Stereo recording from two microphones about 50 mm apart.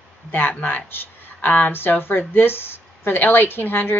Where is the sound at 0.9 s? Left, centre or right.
Left.